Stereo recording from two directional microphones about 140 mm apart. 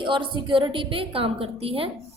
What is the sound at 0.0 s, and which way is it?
A woman's voice, 35° right (ahead or behind).